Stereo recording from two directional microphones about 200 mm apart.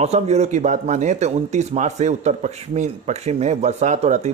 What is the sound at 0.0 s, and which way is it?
Speech, 30° right (ahead or behind).